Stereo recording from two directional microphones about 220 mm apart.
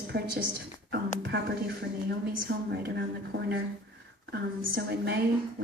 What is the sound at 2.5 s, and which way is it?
Speech, 55° right (ahead or behind).